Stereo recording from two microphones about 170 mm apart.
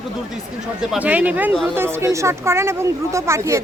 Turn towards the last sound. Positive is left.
turn(degrees=-15)  # may be behind; listen again after turning